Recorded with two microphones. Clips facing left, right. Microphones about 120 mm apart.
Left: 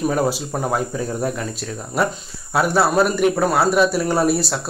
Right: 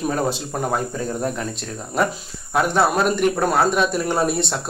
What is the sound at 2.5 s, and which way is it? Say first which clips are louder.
A man's voice: left 2 dB; 5° left (ahead or behind).